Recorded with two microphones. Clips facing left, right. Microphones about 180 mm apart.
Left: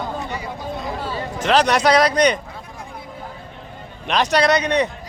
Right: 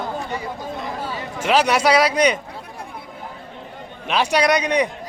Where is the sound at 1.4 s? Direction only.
10° right (ahead or behind).